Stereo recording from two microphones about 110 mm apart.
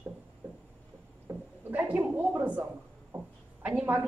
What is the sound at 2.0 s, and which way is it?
A woman's voice, 15° right (ahead or behind).